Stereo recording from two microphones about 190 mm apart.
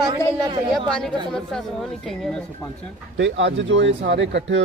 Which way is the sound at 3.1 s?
70° right (ahead or behind).